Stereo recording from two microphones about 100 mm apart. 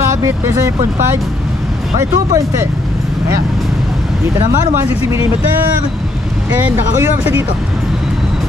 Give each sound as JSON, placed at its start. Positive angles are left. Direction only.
{"t": 0.0, "sound": "speech", "side_deg": -30}
{"t": 2.0, "sound": "speech", "side_deg": -30}
{"t": 6.6, "sound": "speech", "side_deg": -20}